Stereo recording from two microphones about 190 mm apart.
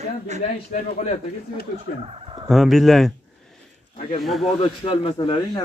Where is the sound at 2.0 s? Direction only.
30° right (ahead or behind).